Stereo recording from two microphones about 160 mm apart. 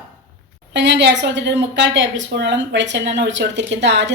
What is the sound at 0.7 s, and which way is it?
Speech, 90° right.